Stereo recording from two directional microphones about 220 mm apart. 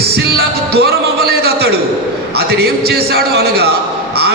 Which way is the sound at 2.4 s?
45° right (ahead or behind).